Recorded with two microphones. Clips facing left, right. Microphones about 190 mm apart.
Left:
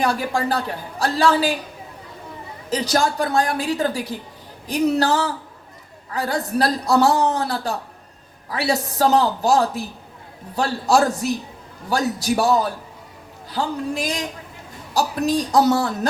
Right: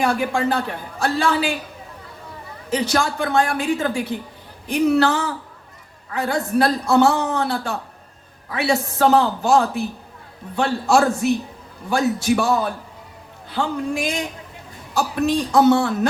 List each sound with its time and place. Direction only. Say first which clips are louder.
0.0 s a man's voice: right 1 dB; 35° left (ahead or behind)
2.6 s a man's voice: even; 35° left (ahead or behind)
15.4 s a man's voice: right 2 dB; 40° left (ahead or behind)